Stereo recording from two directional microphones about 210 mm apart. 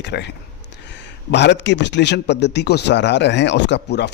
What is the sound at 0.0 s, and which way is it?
A man's voice, 55° left (ahead or behind).